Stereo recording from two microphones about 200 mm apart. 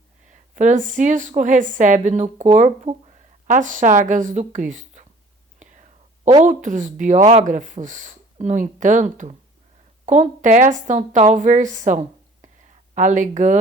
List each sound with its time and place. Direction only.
0.5 s a woman's voice: 40° right (ahead or behind)
5.6 s whispering: 40° right (ahead or behind)
6.2 s a woman's voice: 40° right (ahead or behind)